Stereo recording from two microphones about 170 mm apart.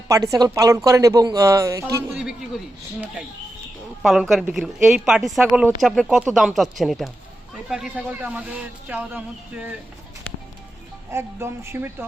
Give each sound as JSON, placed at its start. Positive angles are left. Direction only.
{"t": 0.1, "sound": "a man's voice", "side_deg": -20}
{"t": 4.0, "sound": "a woman's voice", "side_deg": 0}
{"t": 11.1, "sound": "speech", "side_deg": -15}